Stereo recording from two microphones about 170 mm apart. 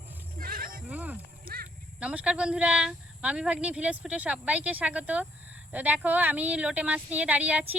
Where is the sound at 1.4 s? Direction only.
60° right (ahead or behind).